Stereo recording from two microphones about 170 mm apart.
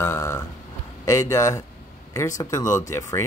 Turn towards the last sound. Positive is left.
turn(degrees=15)  # may be behind; listen again after turning